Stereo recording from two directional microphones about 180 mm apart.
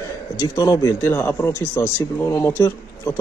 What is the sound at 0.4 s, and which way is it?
Speech, 20° left (ahead or behind).